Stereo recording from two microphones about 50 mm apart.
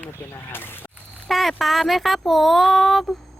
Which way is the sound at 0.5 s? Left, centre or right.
Left.